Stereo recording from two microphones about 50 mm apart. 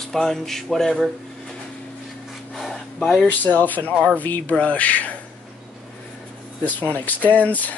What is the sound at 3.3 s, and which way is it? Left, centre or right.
Speech, left.